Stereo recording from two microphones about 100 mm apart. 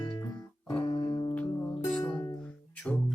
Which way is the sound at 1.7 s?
15° left (ahead or behind).